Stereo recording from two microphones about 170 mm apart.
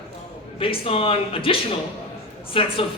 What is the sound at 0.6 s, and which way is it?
A man's voice, 35° left (ahead or behind).